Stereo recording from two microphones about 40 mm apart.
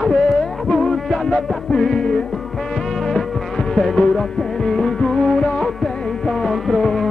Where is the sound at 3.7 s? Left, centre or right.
Centre.